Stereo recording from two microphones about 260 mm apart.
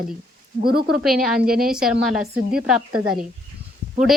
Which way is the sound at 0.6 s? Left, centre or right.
Right.